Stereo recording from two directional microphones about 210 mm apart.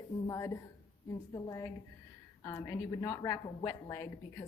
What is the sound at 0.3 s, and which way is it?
Speech, 15° left (ahead or behind).